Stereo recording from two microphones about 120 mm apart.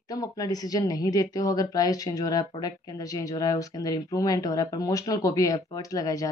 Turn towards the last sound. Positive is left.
turn(degrees=30)  # may be behind; listen again after turning